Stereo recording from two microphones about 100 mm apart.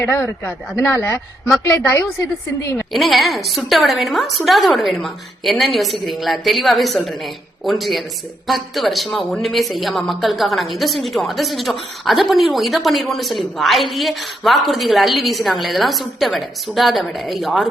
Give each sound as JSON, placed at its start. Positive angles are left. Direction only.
{"t": 0.0, "sound": "speech", "side_deg": 20}
{"t": 2.9, "sound": "speech", "side_deg": 0}